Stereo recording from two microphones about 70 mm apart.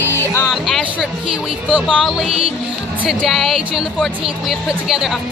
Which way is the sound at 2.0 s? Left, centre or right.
Centre.